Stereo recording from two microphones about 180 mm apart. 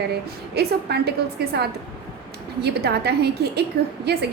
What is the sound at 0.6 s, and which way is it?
A woman's voice, 65° right (ahead or behind).